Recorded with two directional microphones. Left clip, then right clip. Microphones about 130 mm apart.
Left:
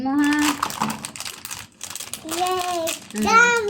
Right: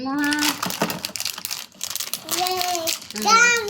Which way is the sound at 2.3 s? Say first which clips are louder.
Left 1 dB; 35° right (ahead or behind).